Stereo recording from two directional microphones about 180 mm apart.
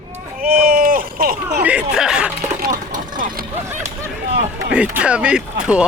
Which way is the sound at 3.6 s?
15° right (ahead or behind).